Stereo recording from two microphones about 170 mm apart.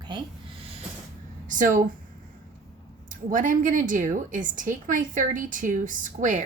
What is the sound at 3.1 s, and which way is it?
A woman's voice, 50° right (ahead or behind).